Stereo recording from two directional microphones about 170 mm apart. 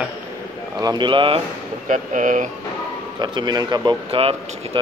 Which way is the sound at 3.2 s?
25° right (ahead or behind).